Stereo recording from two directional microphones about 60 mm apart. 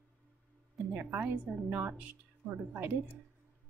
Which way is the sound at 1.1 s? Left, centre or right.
Right.